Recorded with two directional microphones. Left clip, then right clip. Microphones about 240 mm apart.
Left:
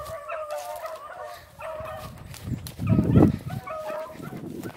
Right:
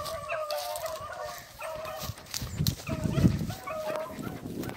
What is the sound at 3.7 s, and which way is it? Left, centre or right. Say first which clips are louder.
Dog: left 2 dB; centre.